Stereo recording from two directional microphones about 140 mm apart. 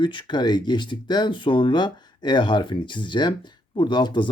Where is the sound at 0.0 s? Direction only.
35° left (ahead or behind).